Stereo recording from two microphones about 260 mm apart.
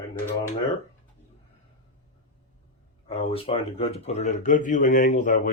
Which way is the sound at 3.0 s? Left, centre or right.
Left.